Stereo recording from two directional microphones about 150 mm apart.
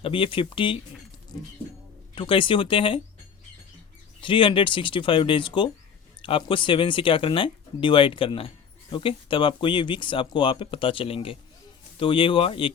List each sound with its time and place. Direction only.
0.0 s speech: 35° left (ahead or behind)
2.1 s speech: 35° left (ahead or behind)
4.2 s speech: 35° left (ahead or behind)